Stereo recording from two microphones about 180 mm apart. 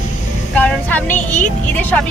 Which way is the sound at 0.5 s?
10° left (ahead or behind).